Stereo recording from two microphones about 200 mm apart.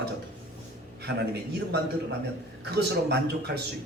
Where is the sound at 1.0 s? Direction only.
55° right (ahead or behind).